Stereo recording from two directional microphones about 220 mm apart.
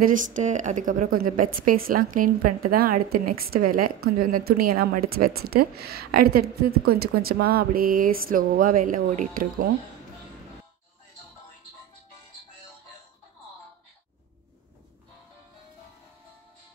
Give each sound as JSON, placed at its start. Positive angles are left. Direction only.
{"t": 0.0, "sound": "a woman's voice", "side_deg": -35}